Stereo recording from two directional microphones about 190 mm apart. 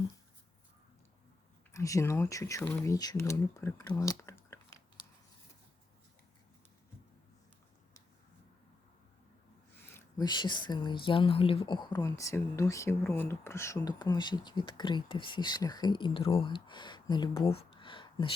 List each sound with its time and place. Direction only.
1.7 s speech: 15° left (ahead or behind)
9.8 s speech: 15° left (ahead or behind)